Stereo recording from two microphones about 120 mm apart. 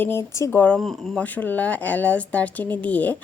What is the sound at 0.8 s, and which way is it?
Speech, centre (ahead or behind).